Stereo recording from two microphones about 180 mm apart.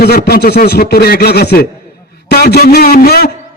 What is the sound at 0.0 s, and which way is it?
Speech, 60° left (ahead or behind).